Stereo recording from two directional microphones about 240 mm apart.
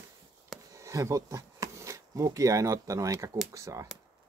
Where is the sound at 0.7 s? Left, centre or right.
Centre.